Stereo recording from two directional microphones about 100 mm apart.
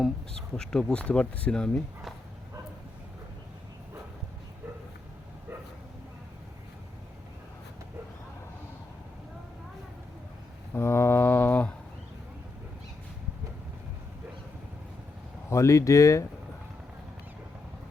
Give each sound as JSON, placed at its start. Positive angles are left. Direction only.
{"t": 0.0, "sound": "speech", "side_deg": 5}
{"t": 10.8, "sound": "a sound", "side_deg": 25}
{"t": 15.4, "sound": "speech", "side_deg": 30}